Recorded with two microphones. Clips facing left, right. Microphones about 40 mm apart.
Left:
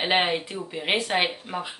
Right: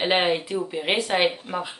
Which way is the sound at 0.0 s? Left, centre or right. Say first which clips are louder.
Right 2 dB; centre.